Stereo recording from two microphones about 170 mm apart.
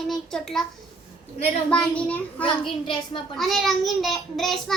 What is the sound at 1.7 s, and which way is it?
Speech, 5° left (ahead or behind).